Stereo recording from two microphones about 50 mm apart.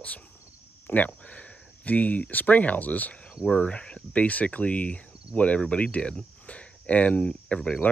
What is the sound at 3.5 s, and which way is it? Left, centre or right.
Speech, centre.